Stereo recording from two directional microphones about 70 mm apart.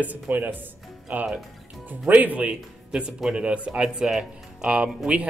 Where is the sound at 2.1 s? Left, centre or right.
Right.